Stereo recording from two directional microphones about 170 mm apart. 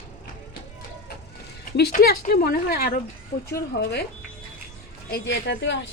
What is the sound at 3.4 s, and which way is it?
Speech, 70° left (ahead or behind).